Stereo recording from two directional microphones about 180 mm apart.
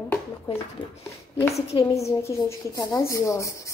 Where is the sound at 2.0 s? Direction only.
15° left (ahead or behind).